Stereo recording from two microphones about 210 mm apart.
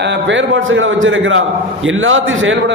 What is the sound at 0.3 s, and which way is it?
A man's voice, 65° right (ahead or behind).